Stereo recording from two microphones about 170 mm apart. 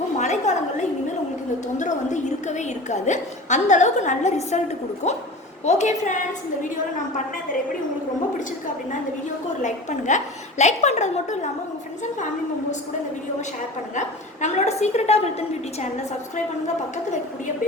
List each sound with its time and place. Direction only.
0.2 s a sound: 45° left (ahead or behind)
1.6 s a woman's voice: 45° left (ahead or behind)
9.6 s a woman's voice: 45° left (ahead or behind)
14.4 s a woman's voice: 40° left (ahead or behind)